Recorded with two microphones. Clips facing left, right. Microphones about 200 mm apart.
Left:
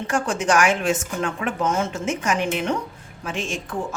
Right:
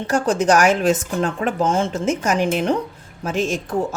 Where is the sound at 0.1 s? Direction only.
40° right (ahead or behind).